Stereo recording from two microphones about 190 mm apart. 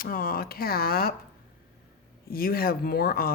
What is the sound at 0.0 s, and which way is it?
Speech, 50° left (ahead or behind).